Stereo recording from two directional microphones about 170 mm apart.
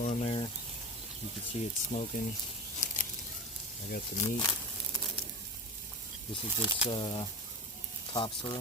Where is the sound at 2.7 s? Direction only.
50° left (ahead or behind).